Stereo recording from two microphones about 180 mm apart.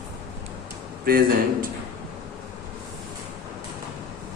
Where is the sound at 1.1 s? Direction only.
55° right (ahead or behind).